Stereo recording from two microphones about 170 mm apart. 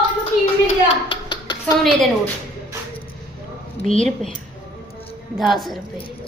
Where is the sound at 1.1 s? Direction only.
25° left (ahead or behind).